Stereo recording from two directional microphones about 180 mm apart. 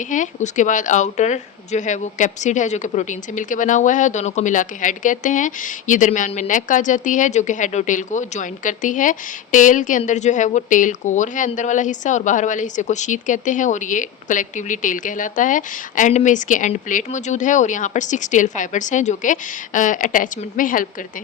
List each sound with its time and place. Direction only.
0.1 s speech: 45° left (ahead or behind)